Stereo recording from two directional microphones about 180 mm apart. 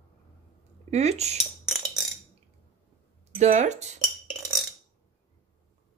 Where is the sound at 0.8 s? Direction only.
35° right (ahead or behind).